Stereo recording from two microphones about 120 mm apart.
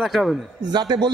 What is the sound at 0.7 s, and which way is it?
Speech, 35° right (ahead or behind).